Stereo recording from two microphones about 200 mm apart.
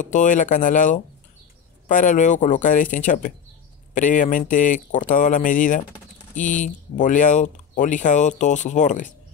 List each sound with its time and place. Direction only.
0.0 s speech: 40° left (ahead or behind)